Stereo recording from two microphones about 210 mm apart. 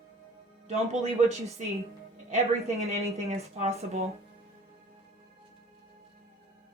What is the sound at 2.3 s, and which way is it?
Speech, 30° right (ahead or behind).